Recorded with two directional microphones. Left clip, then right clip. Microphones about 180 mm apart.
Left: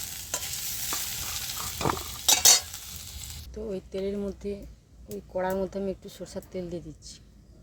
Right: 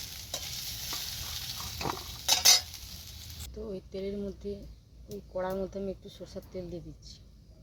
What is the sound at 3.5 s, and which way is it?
Speech, 25° left (ahead or behind).